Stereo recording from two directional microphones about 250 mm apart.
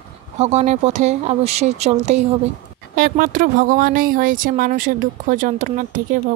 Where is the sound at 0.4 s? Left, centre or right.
Right.